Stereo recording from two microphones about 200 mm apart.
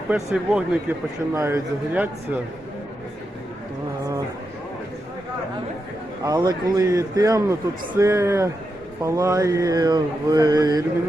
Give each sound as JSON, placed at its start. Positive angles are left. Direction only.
{"t": 0.1, "sound": "speech", "side_deg": -5}
{"t": 6.2, "sound": "speech", "side_deg": -20}